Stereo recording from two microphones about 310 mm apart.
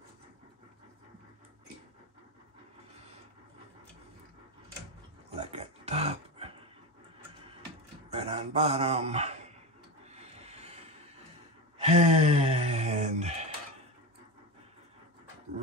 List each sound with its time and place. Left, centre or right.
5.3 s dog: centre
8.1 s speech: centre
10.1 s printer: centre
11.8 s a sound: right